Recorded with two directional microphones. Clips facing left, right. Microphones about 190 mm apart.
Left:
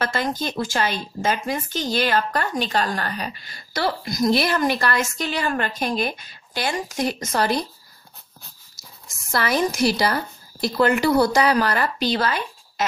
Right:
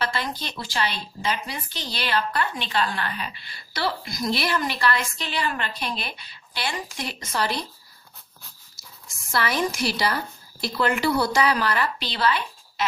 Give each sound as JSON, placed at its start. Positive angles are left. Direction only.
{"t": 0.0, "sound": "a woman's voice", "side_deg": 45}
{"t": 8.7, "sound": "speech", "side_deg": 45}